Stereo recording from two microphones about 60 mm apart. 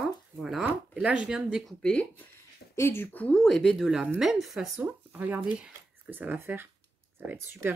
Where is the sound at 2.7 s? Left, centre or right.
Left.